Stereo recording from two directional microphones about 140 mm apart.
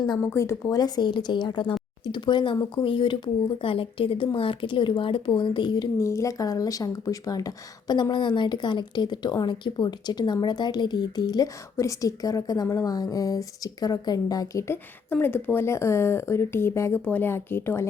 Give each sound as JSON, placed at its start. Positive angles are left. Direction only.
{"t": 0.2, "sound": "speech", "side_deg": 20}